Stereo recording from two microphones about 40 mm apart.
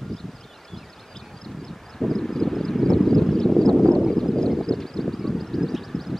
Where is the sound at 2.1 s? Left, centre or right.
Centre.